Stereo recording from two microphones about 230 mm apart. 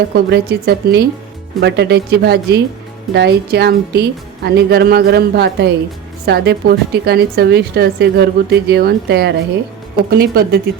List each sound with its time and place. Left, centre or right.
0.1 s a woman's voice: right